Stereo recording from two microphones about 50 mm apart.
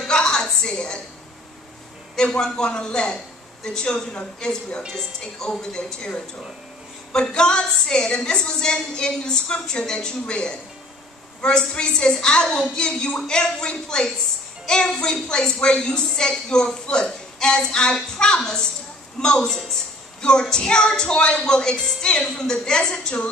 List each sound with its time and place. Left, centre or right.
0.1 s music: centre
2.1 s a woman's voice: centre